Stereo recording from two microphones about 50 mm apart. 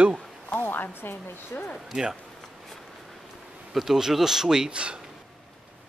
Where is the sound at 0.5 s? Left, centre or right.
Left.